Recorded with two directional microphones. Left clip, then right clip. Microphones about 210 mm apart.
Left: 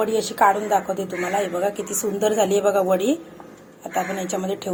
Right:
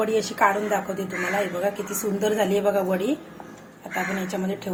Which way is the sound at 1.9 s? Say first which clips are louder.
Left 3 dB; 30° left (ahead or behind).